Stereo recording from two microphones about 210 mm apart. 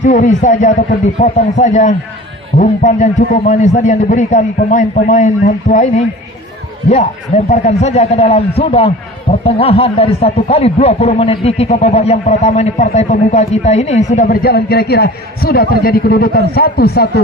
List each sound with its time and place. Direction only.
0.0 s speech: 40° left (ahead or behind)
6.9 s speech: 35° left (ahead or behind)